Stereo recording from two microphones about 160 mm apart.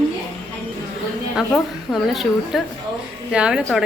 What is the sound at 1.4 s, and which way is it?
A woman's voice, centre (ahead or behind).